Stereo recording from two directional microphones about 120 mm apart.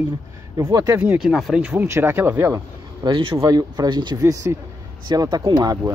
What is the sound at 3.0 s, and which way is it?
Speech, 40° right (ahead or behind).